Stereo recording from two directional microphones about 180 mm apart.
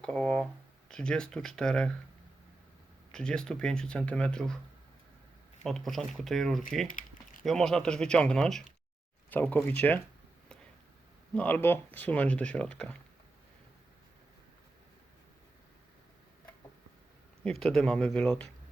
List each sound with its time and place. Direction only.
0.0 s speech: 5° left (ahead or behind)
3.1 s speech: 5° left (ahead or behind)
5.6 s speech: centre (ahead or behind)
6.8 s a sound: 50° left (ahead or behind)
7.4 s speech: centre (ahead or behind)
11.3 s speech: 10° left (ahead or behind)
17.4 s speech: 5° left (ahead or behind)